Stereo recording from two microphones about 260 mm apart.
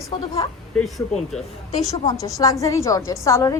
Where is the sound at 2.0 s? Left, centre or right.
Centre.